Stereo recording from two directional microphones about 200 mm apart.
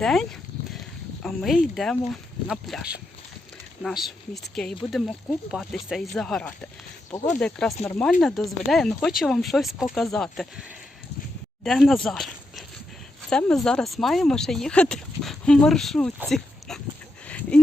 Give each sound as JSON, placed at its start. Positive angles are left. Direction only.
{"t": 0.0, "sound": "speech", "side_deg": 0}
{"t": 16.3, "sound": "dog", "side_deg": 0}
{"t": 17.2, "sound": "a sound", "side_deg": 5}